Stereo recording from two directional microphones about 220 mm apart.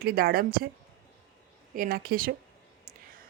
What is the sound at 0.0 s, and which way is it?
Speech, 40° right (ahead or behind).